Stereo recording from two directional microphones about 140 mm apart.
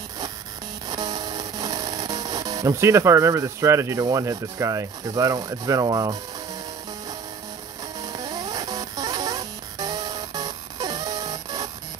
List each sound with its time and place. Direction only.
0.8 s speech: 25° right (ahead or behind)
8.0 s music: 25° right (ahead or behind)